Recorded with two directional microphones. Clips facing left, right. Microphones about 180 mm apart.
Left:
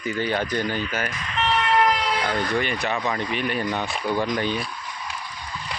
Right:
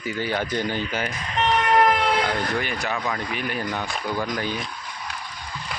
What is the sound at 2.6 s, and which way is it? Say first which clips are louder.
Speech: left 2 dB; centre (ahead or behind).